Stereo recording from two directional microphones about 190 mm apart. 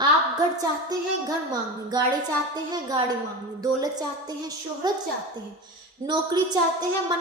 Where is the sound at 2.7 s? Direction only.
20° right (ahead or behind).